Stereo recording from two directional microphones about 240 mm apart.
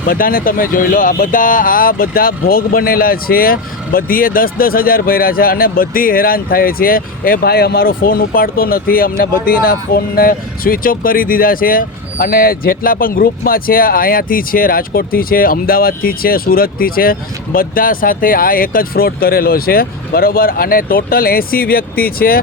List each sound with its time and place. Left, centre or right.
0.1 s speech: left